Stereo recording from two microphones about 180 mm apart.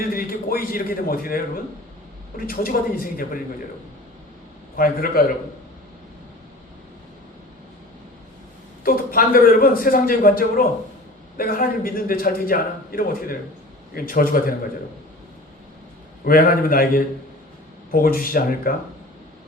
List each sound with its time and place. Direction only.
0.1 s a man's voice: 55° left (ahead or behind)
4.8 s a man's voice: 55° left (ahead or behind)
8.8 s a man's voice: 50° left (ahead or behind)
16.2 s a man's voice: 55° left (ahead or behind)